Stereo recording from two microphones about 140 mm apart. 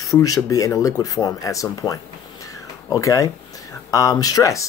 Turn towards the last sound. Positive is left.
turn(degrees=25)  # may be behind; listen again after turning